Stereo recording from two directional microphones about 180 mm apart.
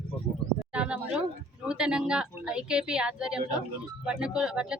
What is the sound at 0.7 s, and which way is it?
Speech, 5° right (ahead or behind).